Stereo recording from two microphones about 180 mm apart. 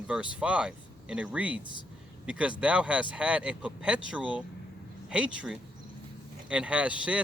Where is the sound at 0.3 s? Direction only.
5° right (ahead or behind).